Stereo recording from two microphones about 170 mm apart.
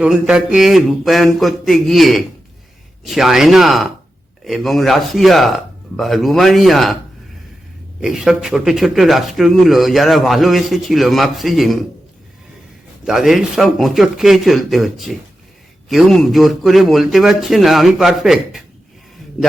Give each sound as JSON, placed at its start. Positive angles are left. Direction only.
{"t": 0.0, "sound": "speech", "side_deg": -5}
{"t": 8.0, "sound": "speech", "side_deg": -5}
{"t": 13.1, "sound": "a man's voice", "side_deg": 0}